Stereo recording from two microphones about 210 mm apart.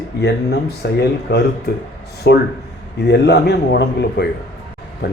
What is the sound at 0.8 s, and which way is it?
Speech, 50° left (ahead or behind).